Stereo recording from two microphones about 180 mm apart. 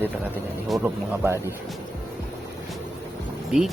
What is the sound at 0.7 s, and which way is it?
Speech, centre (ahead or behind).